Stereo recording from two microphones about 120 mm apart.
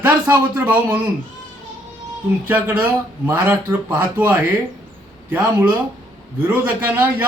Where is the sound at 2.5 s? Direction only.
15° right (ahead or behind).